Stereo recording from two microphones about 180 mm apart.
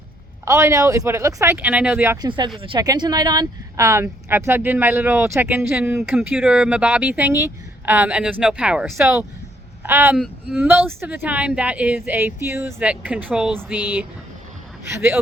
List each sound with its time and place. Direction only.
0.4 s speech: 15° right (ahead or behind)
2.2 s speech: 25° right (ahead or behind)